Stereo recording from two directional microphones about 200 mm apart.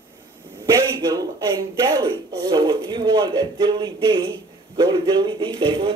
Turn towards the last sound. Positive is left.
turn(degrees=-20)  # may be behind; listen again after turning